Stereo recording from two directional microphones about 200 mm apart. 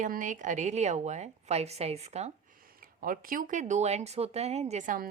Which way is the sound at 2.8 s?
45° right (ahead or behind).